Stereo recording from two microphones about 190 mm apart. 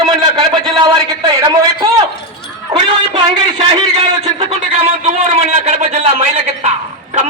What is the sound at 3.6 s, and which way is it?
A man's voice, 30° right (ahead or behind).